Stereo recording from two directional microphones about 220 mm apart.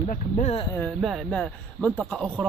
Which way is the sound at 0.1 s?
30° left (ahead or behind).